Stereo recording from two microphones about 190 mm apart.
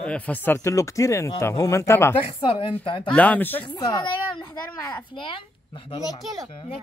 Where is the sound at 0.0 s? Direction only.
5° left (ahead or behind).